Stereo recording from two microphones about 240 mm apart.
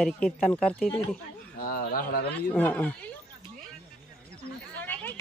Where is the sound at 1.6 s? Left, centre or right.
Left.